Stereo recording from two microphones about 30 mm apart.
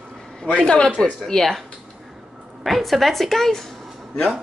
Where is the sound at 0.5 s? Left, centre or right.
Left.